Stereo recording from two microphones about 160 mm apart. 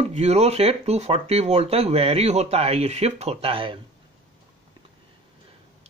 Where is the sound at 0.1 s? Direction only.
40° right (ahead or behind).